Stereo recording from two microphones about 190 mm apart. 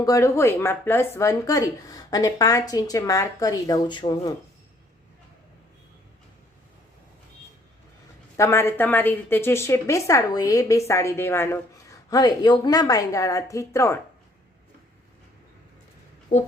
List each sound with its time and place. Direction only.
0.0 s a woman's voice: 15° left (ahead or behind)
8.4 s a woman's voice: 15° left (ahead or behind)
16.3 s speech: 35° left (ahead or behind)